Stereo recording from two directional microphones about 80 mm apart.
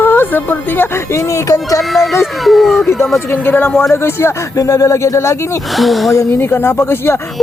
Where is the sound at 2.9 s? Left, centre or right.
Centre.